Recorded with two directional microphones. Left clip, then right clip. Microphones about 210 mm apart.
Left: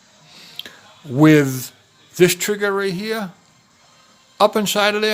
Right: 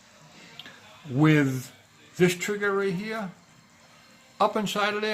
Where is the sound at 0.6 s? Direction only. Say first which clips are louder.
Left 11 dB; 50° left (ahead or behind).